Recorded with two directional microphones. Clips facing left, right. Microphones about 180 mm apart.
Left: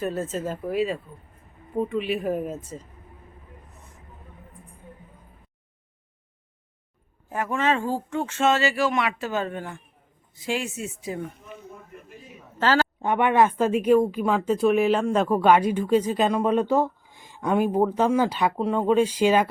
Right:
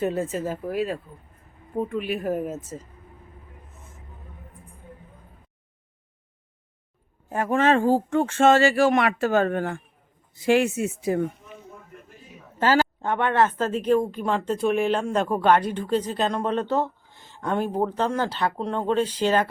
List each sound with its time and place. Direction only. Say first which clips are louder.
0.0 s speech: right 2 dB; 15° right (ahead or behind)
7.3 s speech: right 2 dB; 30° right (ahead or behind)
7.5 s speech: right 6 dB; 50° right (ahead or behind)
12.5 s speech: right 1 dB; 15° right (ahead or behind)
13.0 s a woman's voice: left 2 dB; 15° left (ahead or behind)